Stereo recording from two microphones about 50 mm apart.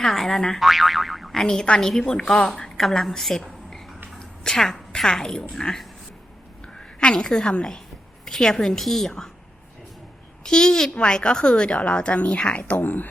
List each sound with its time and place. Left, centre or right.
0.0 s a woman's voice: centre
10.4 s a woman's voice: centre; by 13.1 s left